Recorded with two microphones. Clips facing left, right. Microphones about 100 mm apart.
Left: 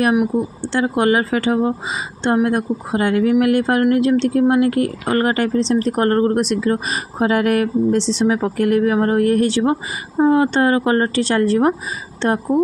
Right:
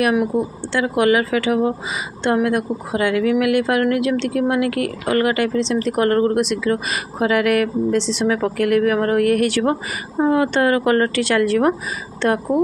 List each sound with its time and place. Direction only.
0.7 s speech: 30° left (ahead or behind)